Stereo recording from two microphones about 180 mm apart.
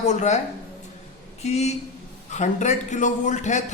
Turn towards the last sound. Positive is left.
turn(degrees=40)  # may be behind; listen again after turning